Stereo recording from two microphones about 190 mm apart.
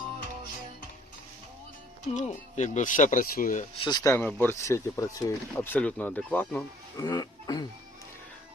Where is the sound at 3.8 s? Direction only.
20° left (ahead or behind).